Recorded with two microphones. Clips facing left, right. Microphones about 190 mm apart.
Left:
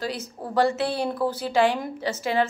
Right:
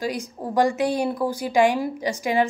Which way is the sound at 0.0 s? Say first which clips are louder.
Right 3 dB; 15° right (ahead or behind).